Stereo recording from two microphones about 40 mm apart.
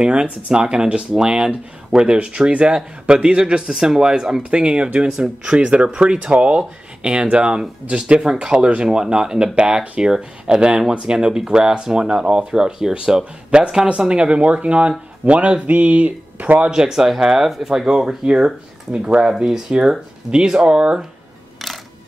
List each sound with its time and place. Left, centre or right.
0.0 s speech: right
2.2 s speech: right
16.7 s speech: centre
17.8 s speech: right